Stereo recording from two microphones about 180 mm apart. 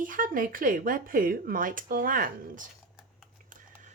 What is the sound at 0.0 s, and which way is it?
Speech, 50° right (ahead or behind).